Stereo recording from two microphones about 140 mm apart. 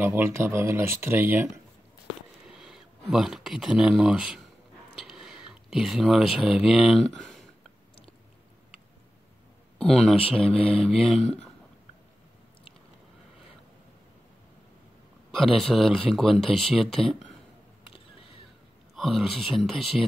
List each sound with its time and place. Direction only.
0.0 s speech: 15° right (ahead or behind)
2.4 s speech: 5° right (ahead or behind)
9.8 s speech: 5° left (ahead or behind)
15.3 s speech: centre (ahead or behind)
18.9 s speech: centre (ahead or behind)